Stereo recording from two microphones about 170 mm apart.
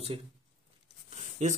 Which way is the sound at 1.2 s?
40° right (ahead or behind).